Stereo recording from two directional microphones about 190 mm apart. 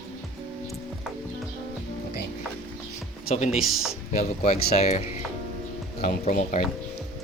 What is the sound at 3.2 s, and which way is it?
Speech, 35° left (ahead or behind).